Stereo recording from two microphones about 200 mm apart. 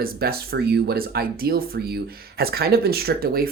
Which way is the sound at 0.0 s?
50° right (ahead or behind).